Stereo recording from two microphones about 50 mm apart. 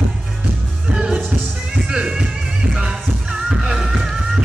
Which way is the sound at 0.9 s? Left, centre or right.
Centre.